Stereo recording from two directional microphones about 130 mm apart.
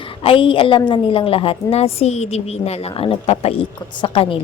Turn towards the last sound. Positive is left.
turn(degrees=45)  # may be behind; listen again after turning